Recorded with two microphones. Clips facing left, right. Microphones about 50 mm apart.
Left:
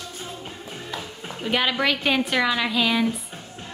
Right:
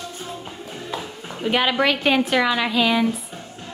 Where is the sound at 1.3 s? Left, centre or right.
Centre.